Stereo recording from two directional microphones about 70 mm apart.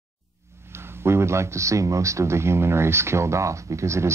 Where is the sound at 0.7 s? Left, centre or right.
Right.